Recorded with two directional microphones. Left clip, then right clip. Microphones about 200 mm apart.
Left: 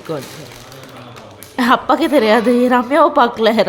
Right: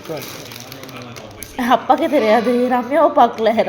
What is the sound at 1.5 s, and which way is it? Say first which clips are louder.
A woman's voice: left 1 dB; 30° left (ahead or behind).